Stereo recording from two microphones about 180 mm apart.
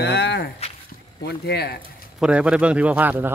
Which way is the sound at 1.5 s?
65° left (ahead or behind).